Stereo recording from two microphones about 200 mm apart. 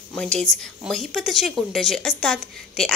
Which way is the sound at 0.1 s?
5° left (ahead or behind).